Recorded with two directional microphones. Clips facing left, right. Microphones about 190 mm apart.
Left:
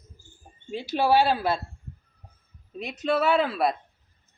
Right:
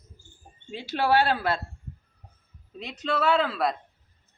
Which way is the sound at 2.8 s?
10° left (ahead or behind).